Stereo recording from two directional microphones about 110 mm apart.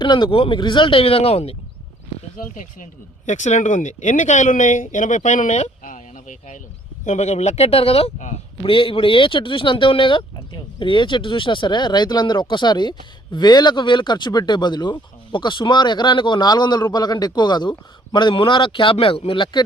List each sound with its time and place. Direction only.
0.0 s speech: 45° left (ahead or behind); by 1.5 s 65° left (ahead or behind)
3.2 s speech: 90° left
7.0 s speech: 90° left
8.7 s speech: 50° left (ahead or behind)